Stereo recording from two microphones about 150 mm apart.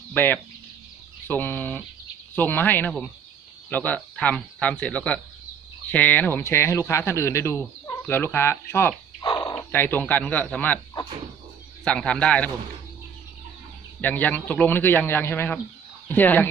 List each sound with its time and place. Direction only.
0.1 s a man's voice: 10° left (ahead or behind)
9.2 s a sound: 25° left (ahead or behind)
9.6 s a man's voice: 15° left (ahead or behind)
11.9 s a man's voice: 5° left (ahead or behind)
14.0 s a man's voice: 10° left (ahead or behind)